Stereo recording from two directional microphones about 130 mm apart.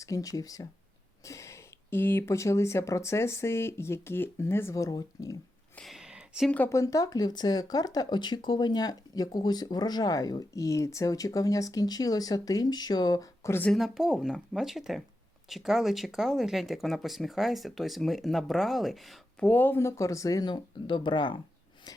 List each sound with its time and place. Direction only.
0.0 s speech: 25° left (ahead or behind)
5.7 s a sound: centre (ahead or behind)
6.7 s speech: 25° left (ahead or behind)
13.7 s speech: centre (ahead or behind)
19.5 s speech: 15° left (ahead or behind); by 21.4 s 40° left (ahead or behind)